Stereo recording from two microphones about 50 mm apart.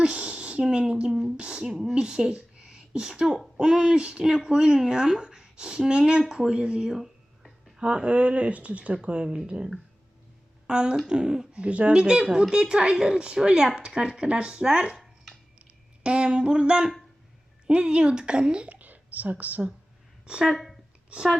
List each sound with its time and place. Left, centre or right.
0.0 s a sound: centre
1.4 s speech: centre
3.2 s speech: centre
3.6 s speech: centre
15.0 s a sound: centre
16.0 s speech: right
18.7 s speech: right
20.4 s speech: centre